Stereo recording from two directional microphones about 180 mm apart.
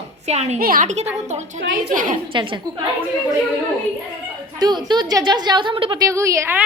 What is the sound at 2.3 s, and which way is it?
Speech, 30° right (ahead or behind).